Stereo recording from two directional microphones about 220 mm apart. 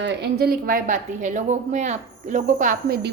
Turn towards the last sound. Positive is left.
turn(degrees=-45)  # may be behind; listen again after turning